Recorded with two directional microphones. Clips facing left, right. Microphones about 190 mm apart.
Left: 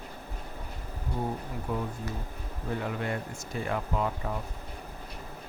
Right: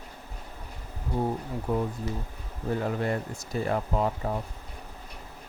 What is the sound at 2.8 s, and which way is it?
Speech, 35° right (ahead or behind).